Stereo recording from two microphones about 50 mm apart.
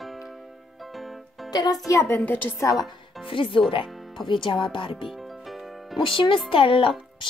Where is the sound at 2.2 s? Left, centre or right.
Left.